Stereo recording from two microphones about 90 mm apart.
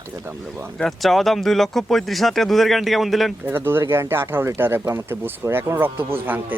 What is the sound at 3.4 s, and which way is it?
Speech, 25° right (ahead or behind).